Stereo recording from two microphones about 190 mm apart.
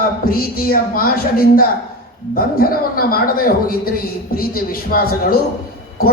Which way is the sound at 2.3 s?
50° left (ahead or behind).